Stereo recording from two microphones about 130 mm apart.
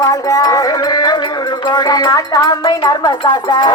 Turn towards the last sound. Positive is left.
turn(degrees=35)  # may be behind; listen again after turning